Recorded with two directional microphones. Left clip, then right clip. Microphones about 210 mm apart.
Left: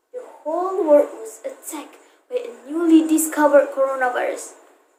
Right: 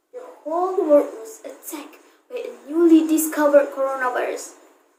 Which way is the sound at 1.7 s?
15° left (ahead or behind).